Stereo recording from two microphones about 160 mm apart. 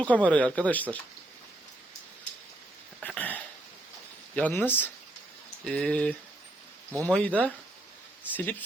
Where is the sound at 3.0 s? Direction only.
10° left (ahead or behind).